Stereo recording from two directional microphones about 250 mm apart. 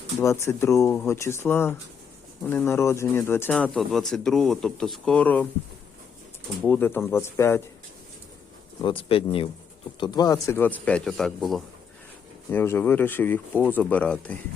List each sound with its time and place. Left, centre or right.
0.2 s speech: centre
6.6 s speech: centre
8.8 s speech: left; by 14.3 s centre